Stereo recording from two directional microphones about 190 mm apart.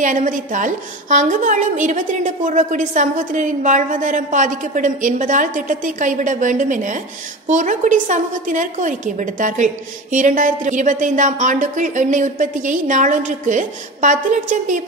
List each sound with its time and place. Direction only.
0.0 s a woman's voice: 45° right (ahead or behind)